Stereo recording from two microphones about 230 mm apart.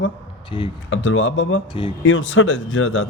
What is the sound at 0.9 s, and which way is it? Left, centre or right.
Speech, left.